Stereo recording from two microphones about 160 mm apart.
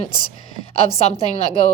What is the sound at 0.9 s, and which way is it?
Speech, 40° left (ahead or behind).